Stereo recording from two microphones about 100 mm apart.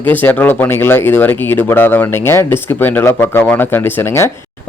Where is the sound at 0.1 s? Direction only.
20° left (ahead or behind).